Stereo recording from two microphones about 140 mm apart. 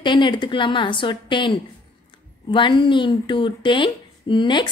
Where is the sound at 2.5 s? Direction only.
35° left (ahead or behind).